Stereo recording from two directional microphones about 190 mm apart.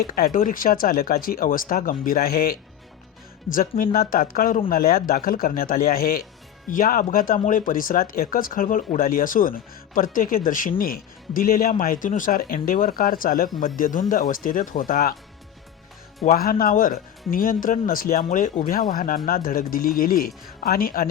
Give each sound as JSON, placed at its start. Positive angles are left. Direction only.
{"t": 0.1, "sound": "speech", "side_deg": 50}
{"t": 16.2, "sound": "speech", "side_deg": 45}